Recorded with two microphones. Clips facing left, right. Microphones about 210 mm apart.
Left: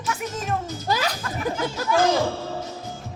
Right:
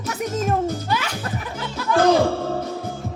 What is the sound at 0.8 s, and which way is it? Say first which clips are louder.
Music: even; 35° left (ahead or behind).